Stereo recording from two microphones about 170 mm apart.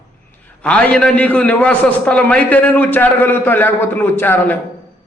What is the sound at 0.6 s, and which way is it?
A man's voice, 10° left (ahead or behind).